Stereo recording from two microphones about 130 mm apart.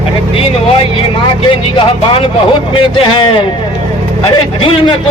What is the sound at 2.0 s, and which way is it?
A man's voice, 40° left (ahead or behind).